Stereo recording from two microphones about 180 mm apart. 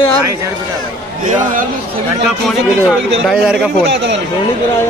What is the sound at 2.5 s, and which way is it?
Speech, centre (ahead or behind).